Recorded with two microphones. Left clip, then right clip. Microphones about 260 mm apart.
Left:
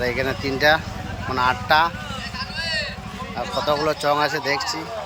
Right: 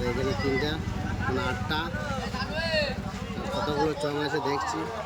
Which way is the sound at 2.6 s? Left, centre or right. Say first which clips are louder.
Left 2 dB; right.